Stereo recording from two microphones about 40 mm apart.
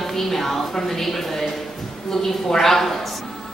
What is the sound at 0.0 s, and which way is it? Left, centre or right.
A man's voice, centre.